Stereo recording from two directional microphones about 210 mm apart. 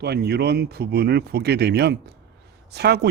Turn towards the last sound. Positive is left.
turn(degrees=-50)  # may be behind; listen again after turning